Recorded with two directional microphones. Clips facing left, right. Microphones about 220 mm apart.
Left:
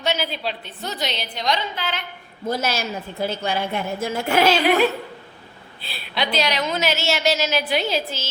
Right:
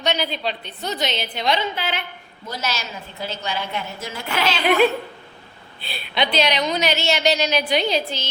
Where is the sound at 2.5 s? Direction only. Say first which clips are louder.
Left 5 dB; 50° left (ahead or behind).